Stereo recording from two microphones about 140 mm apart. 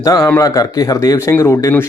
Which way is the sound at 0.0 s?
25° left (ahead or behind).